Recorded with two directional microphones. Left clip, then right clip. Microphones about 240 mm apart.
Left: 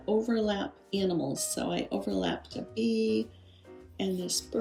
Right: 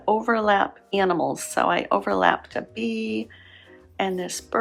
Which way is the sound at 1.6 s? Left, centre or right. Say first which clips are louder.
Right 12 dB; centre.